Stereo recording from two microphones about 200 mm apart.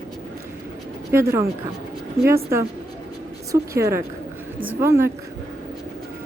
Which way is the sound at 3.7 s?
15° right (ahead or behind).